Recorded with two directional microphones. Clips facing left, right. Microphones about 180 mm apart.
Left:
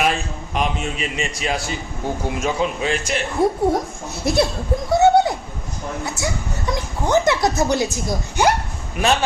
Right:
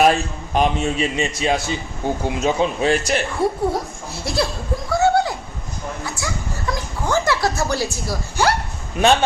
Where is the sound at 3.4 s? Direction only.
20° left (ahead or behind).